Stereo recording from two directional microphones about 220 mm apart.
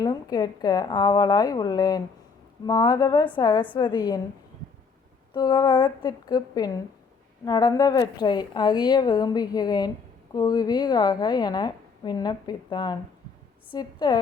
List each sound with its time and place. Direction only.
0.0 s a woman's voice: 15° left (ahead or behind)
5.3 s a woman's voice: 20° left (ahead or behind)